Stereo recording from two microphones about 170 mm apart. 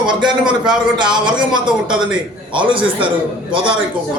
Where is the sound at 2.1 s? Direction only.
30° right (ahead or behind).